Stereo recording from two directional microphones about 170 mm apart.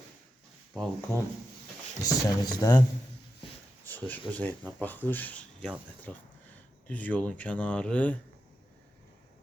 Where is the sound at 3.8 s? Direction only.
10° left (ahead or behind).